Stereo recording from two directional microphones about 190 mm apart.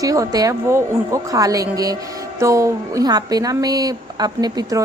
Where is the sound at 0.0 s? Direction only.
15° right (ahead or behind).